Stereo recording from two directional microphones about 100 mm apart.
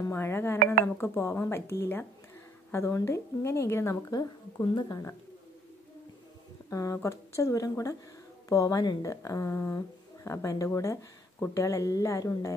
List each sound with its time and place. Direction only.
0.1 s speech: 25° left (ahead or behind)
4.1 s speech: 45° left (ahead or behind)
6.7 s speech: 30° left (ahead or behind)